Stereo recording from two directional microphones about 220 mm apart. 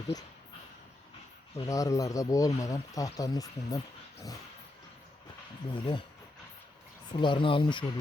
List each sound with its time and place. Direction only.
1.5 s speech: 15° left (ahead or behind)
5.7 s speech: 25° left (ahead or behind)
7.1 s speech: 20° left (ahead or behind)